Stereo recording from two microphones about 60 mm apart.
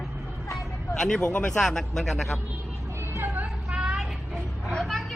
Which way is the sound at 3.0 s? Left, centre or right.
Right.